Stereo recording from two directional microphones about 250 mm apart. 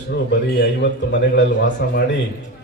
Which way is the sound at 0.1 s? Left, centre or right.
Left.